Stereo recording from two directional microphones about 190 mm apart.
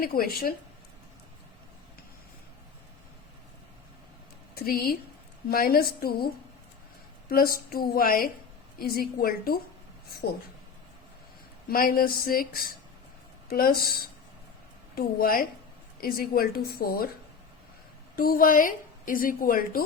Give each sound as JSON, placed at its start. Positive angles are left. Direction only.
{"t": 0.0, "sound": "a woman's voice", "side_deg": 50}
{"t": 4.5, "sound": "a woman's voice", "side_deg": 50}
{"t": 11.7, "sound": "a woman's voice", "side_deg": 50}
{"t": 13.5, "sound": "a woman's voice", "side_deg": 50}
{"t": 14.9, "sound": "a woman's voice", "side_deg": 50}
{"t": 18.2, "sound": "a woman's voice", "side_deg": 50}